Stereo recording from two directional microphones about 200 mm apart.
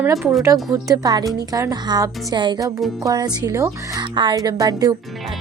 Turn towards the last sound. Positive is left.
turn(degrees=-20)  # may be behind; listen again after turning